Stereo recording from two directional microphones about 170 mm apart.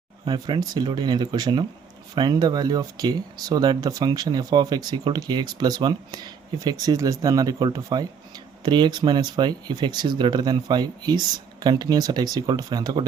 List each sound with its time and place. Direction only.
0.3 s speech: 25° right (ahead or behind)